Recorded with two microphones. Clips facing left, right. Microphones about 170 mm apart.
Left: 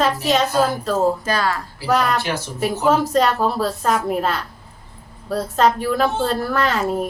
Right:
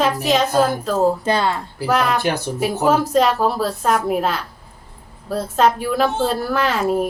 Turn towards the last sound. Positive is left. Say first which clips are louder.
# right 1 dB
turn(degrees=-5)  # may be behind; listen again after turning